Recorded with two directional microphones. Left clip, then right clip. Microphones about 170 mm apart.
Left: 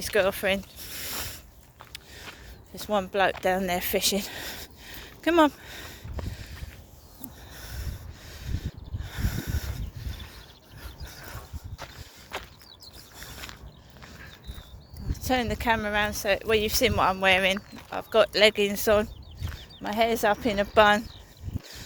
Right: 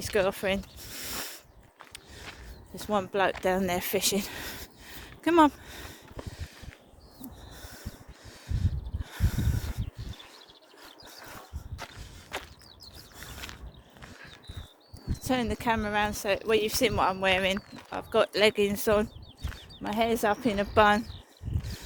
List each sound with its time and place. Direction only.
0.0 s speech: 25° right (ahead or behind)
2.3 s a sound: 35° right (ahead or behind)
7.5 s snort: 30° right (ahead or behind)
11.0 s dog: 30° right (ahead or behind)
12.3 s a sound: 50° left (ahead or behind)
13.1 s pulleys: 45° right (ahead or behind)
15.1 s speech: 40° right (ahead or behind)
17.9 s speech: 40° right (ahead or behind)